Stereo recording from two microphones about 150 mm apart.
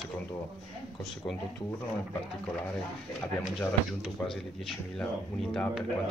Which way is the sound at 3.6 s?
Centre (ahead or behind).